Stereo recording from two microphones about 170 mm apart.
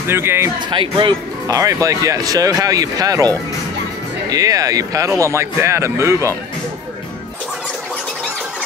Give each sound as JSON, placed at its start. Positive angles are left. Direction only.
{"t": 0.1, "sound": "speech", "side_deg": -15}
{"t": 0.7, "sound": "speech", "side_deg": -30}